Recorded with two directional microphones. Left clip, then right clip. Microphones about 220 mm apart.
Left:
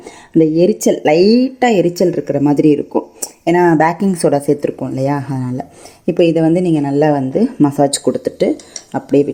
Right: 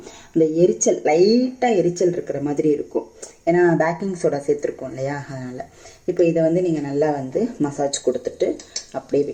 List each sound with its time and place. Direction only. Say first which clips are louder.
0.3 s a woman's voice: left 5 dB; 40° left (ahead or behind)